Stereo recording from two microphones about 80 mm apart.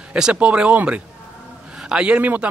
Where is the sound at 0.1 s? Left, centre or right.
Centre.